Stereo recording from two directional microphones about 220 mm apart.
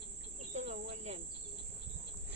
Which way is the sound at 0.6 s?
30° right (ahead or behind).